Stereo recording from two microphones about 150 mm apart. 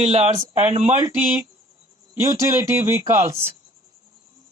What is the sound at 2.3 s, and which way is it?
Speech, 20° right (ahead or behind).